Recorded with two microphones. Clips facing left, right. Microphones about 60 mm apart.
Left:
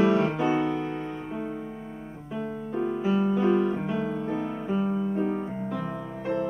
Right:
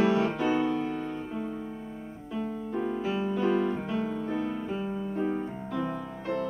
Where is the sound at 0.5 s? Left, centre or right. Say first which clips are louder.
Left 1 dB; centre.